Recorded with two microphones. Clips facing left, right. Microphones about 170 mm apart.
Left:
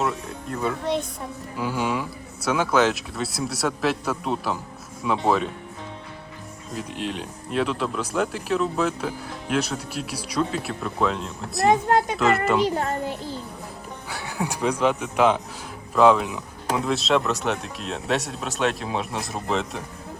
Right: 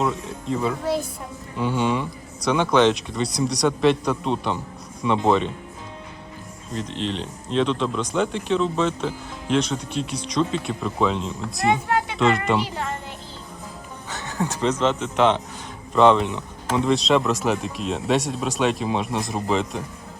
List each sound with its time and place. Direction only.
0.0 s speech: centre (ahead or behind)
6.7 s speech: 10° left (ahead or behind)
11.6 s a child's voice: 35° left (ahead or behind)
14.1 s speech: 10° left (ahead or behind)